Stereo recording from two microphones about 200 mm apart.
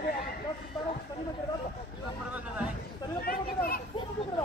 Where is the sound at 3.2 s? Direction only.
45° left (ahead or behind).